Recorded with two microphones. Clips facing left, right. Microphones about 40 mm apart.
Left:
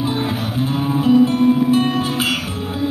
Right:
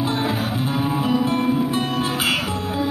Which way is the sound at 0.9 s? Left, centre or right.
Right.